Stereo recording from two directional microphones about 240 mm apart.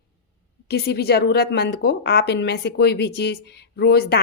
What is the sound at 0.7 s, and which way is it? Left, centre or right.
A woman's voice, left.